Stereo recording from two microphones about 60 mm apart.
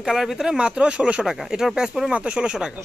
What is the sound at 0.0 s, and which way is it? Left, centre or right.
Speech, centre.